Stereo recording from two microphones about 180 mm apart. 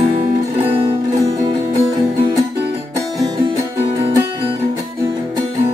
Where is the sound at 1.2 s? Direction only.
20° right (ahead or behind).